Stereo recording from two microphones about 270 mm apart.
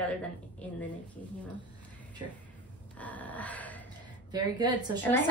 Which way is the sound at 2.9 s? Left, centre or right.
Centre.